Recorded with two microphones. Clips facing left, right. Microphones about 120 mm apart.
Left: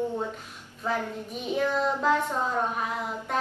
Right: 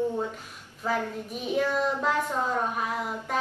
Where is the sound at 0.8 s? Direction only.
Centre (ahead or behind).